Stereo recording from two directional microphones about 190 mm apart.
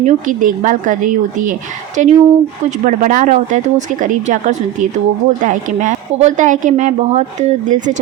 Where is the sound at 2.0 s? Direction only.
40° right (ahead or behind).